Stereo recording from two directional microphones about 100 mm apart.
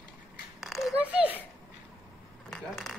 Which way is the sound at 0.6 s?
Centre (ahead or behind).